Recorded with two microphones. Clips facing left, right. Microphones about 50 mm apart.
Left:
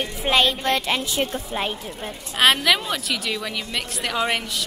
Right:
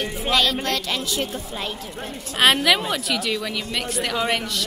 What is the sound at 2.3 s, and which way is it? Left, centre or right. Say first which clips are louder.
A woman's voice: even; centre.